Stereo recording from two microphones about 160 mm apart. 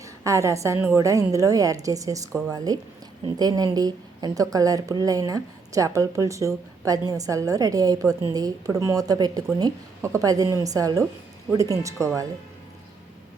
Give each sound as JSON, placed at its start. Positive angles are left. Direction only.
{"t": 0.0, "sound": "a woman's voice", "side_deg": -20}